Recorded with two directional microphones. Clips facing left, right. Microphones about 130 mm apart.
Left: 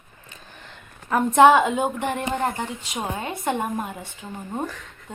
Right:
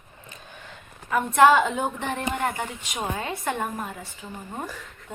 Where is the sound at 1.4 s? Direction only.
20° left (ahead or behind).